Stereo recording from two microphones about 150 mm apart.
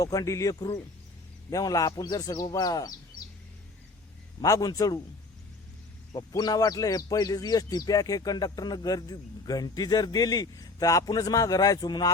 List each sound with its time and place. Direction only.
0.0 s speech: 25° left (ahead or behind)
4.4 s speech: 25° left (ahead or behind)
6.1 s speech: 25° left (ahead or behind)